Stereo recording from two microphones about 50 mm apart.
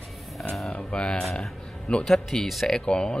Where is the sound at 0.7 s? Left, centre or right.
Centre.